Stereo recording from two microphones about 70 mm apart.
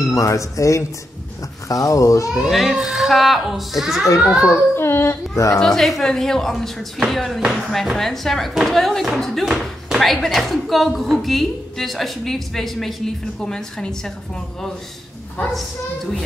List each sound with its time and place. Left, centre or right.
0.0 s speech: left
2.4 s speech: centre
4.4 s a child's voice: left
5.6 s speech: centre